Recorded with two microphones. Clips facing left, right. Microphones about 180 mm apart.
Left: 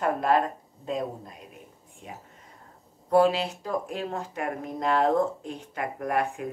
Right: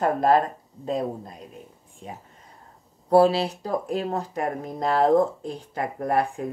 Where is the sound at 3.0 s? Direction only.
35° right (ahead or behind).